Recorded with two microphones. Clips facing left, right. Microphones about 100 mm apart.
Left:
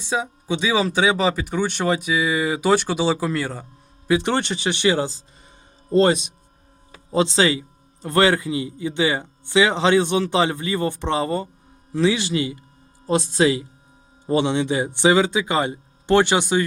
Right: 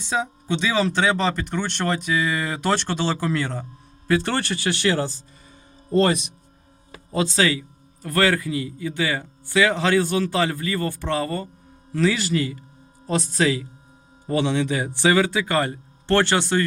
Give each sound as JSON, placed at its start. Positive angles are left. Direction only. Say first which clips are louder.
{"t": 0.0, "sound": "a man's voice", "louder": "even", "side_deg": 10}